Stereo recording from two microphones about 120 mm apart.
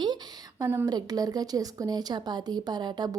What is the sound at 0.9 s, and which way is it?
Speech, 35° right (ahead or behind).